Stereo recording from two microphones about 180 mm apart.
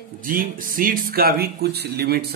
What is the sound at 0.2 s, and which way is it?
Speech, 50° right (ahead or behind).